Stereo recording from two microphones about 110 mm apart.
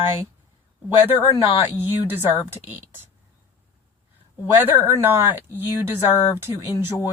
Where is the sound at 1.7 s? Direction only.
20° right (ahead or behind).